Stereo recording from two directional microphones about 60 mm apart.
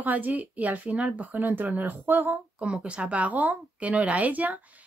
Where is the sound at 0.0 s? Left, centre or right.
Right.